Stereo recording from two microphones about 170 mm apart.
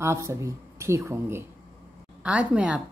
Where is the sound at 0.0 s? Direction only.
15° right (ahead or behind).